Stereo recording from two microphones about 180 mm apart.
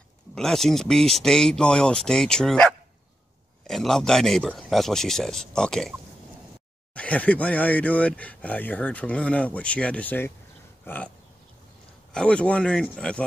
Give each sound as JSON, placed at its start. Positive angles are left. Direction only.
{"t": 0.3, "sound": "speech", "side_deg": 5}
{"t": 12.1, "sound": "speech", "side_deg": 5}